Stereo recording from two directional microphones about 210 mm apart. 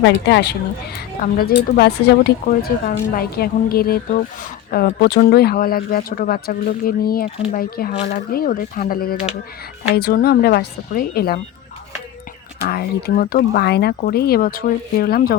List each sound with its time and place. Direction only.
0.0 s a woman's voice: 55° left (ahead or behind)
1.2 s speech: 45° left (ahead or behind)
12.6 s speech: 45° left (ahead or behind)